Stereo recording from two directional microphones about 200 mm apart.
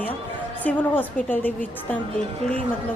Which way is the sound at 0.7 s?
10° left (ahead or behind).